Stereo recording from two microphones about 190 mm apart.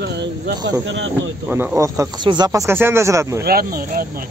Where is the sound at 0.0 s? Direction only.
65° right (ahead or behind).